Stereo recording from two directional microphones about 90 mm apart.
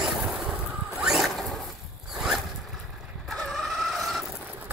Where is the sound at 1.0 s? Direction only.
5° right (ahead or behind).